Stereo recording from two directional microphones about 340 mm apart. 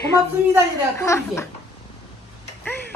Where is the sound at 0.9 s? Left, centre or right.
Centre.